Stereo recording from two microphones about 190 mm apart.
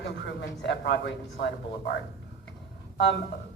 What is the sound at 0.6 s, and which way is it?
Speech, 65° left (ahead or behind).